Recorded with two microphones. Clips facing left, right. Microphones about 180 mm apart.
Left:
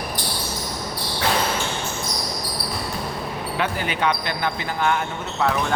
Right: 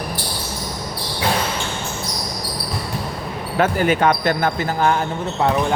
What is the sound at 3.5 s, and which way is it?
Speech, 45° right (ahead or behind).